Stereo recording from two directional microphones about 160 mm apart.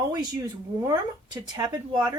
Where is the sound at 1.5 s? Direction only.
25° right (ahead or behind).